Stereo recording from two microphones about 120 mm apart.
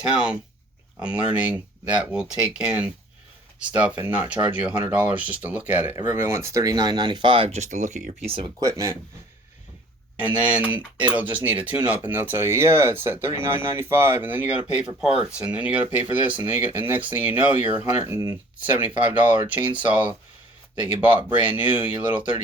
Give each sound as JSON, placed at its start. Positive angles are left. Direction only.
{"t": 0.0, "sound": "speech", "side_deg": -10}
{"t": 7.5, "sound": "speech", "side_deg": -85}
{"t": 8.3, "sound": "speech", "side_deg": -45}
{"t": 8.6, "sound": "speech", "side_deg": -25}
{"t": 10.2, "sound": "speech", "side_deg": -10}